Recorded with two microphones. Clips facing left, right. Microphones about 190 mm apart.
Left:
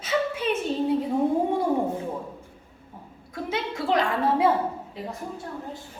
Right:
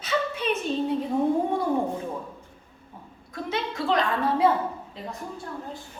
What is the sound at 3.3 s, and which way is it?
A woman's voice, 25° left (ahead or behind).